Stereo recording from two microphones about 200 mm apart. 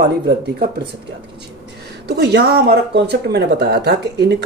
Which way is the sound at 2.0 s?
55° right (ahead or behind).